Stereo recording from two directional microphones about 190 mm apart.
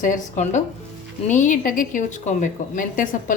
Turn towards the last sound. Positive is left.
turn(degrees=45)  # may be behind; listen again after turning